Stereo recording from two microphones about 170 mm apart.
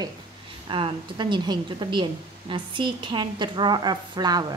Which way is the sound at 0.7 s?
30° right (ahead or behind).